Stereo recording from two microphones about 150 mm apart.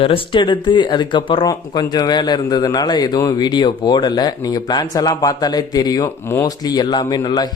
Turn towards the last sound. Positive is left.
turn(degrees=30)  # may be behind; listen again after turning